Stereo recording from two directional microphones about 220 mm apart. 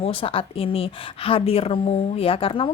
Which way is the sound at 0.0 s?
25° left (ahead or behind).